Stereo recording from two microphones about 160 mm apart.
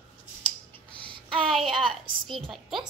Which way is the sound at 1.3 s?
Centre (ahead or behind).